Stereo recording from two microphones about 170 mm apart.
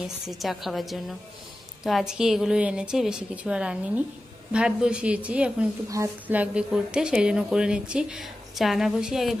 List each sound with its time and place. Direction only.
0.3 s a woman's voice: centre (ahead or behind)